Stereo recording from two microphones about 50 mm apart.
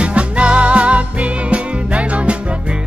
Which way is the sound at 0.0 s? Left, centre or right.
Right.